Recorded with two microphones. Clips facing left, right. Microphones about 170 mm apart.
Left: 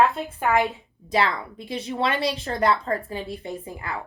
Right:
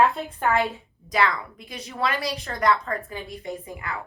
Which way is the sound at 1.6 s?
25° left (ahead or behind).